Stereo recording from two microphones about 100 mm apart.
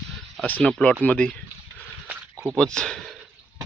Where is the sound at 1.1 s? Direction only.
15° left (ahead or behind).